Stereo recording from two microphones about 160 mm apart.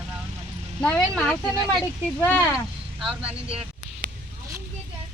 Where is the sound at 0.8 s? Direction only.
5° left (ahead or behind).